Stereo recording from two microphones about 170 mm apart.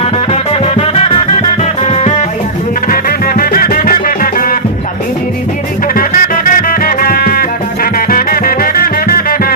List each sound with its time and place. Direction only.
0.6 s music: 35° left (ahead or behind)
2.9 s music: 60° left (ahead or behind)
5.9 s music: 55° left (ahead or behind)